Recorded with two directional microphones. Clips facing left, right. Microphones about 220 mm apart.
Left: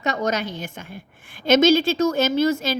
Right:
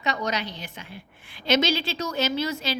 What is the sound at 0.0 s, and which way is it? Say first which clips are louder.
A woman's voice: left 5 dB; 45° left (ahead or behind).